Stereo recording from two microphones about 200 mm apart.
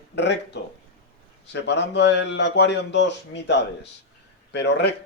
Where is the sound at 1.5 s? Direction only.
60° left (ahead or behind).